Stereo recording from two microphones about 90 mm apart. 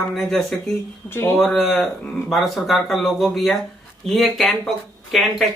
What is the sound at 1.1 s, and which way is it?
Speech, 25° left (ahead or behind).